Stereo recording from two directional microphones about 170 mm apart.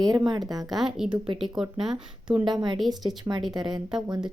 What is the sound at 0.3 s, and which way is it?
Speech, 25° right (ahead or behind).